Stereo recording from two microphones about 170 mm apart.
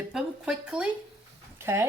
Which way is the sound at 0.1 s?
5° right (ahead or behind).